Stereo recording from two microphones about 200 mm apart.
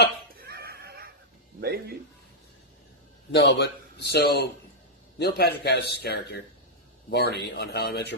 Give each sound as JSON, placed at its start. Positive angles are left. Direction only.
{"t": 0.3, "sound": "neigh", "side_deg": -50}
{"t": 1.6, "sound": "speech", "side_deg": -50}
{"t": 3.3, "sound": "a man's voice", "side_deg": 55}